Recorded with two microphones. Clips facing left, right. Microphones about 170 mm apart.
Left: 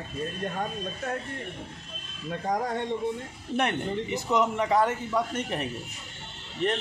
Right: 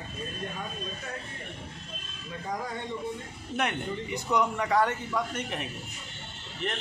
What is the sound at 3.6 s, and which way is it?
A man's voice, 25° left (ahead or behind).